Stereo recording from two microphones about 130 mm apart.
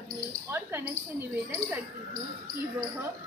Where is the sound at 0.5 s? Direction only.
15° right (ahead or behind).